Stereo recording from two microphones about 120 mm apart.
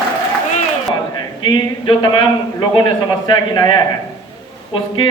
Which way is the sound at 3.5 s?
35° left (ahead or behind).